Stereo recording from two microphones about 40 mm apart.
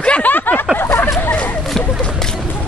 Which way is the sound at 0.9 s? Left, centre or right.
Left.